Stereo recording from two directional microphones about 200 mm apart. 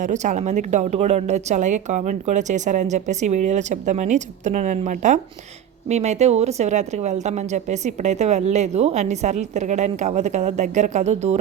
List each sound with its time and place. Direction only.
0.0 s a woman's voice: 35° right (ahead or behind)